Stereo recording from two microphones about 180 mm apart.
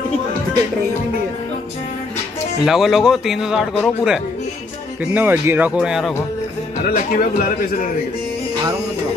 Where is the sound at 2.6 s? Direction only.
Centre (ahead or behind).